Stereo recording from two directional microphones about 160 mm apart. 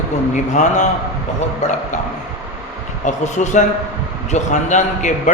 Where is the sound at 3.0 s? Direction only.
50° left (ahead or behind).